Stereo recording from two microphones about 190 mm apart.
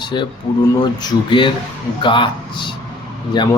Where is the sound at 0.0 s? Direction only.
25° left (ahead or behind).